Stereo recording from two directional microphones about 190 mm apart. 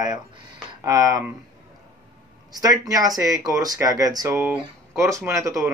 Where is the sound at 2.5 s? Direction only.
20° right (ahead or behind).